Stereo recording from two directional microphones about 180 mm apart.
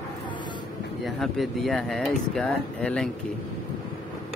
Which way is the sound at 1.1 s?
Centre (ahead or behind).